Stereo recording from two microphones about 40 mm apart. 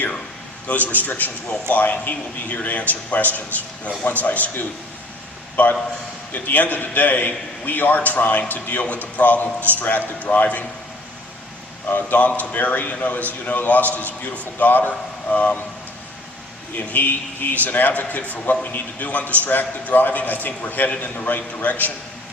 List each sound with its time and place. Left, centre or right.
0.7 s a man's voice: left
5.6 s a man's voice: left
11.9 s a man's voice: left
15.3 s a man's voice: left
16.7 s a man's voice: left
21.2 s a man's voice: left